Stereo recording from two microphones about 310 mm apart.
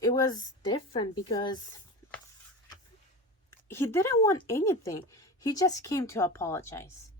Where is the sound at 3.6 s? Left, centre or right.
Centre.